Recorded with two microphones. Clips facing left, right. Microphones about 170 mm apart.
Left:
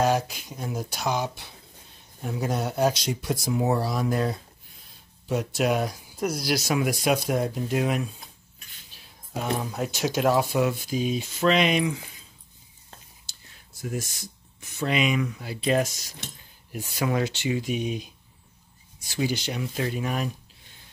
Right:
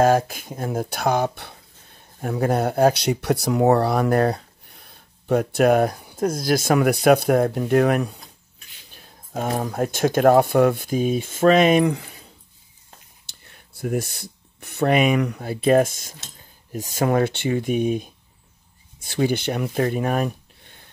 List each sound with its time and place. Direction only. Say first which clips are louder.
0.0 s speech: right 6 dB; 50° right (ahead or behind)
8.9 s speech: right 4 dB; 50° right (ahead or behind)
13.3 s speech: right 7 dB; 60° right (ahead or behind)